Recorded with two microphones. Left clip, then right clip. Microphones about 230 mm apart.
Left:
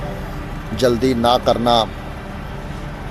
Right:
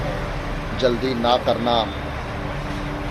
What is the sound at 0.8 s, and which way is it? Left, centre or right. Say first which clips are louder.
Speech: left 4 dB; left.